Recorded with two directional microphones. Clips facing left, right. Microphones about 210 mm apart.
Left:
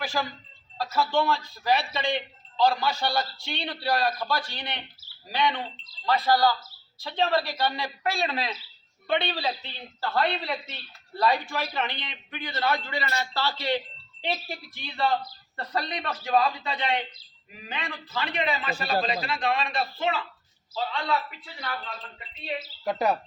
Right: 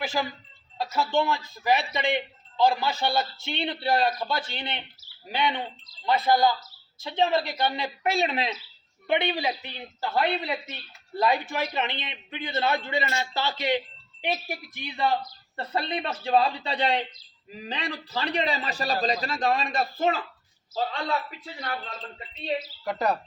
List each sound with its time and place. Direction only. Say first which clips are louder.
0.0 s a man's voice: right 1 dB; 20° right (ahead or behind); by 21.7 s 40° right (ahead or behind)
22.8 s speech: left 2 dB; 20° left (ahead or behind)